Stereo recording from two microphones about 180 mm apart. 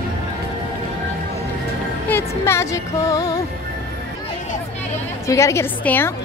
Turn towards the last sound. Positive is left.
turn(degrees=10)  # may be behind; listen again after turning